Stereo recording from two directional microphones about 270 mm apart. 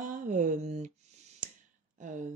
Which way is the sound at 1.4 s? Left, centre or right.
Right.